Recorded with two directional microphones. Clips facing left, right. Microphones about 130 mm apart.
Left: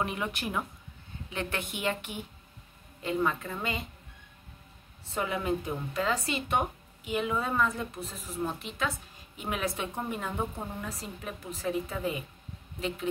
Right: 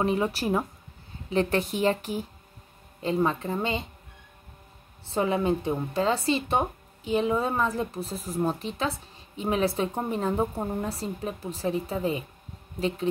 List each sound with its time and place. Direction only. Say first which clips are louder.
0.0 s a woman's voice: right 7 dB; 35° right (ahead or behind)
5.1 s a woman's voice: right 6 dB; 30° right (ahead or behind)